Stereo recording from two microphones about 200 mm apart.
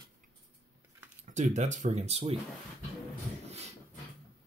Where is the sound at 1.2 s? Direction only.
35° right (ahead or behind).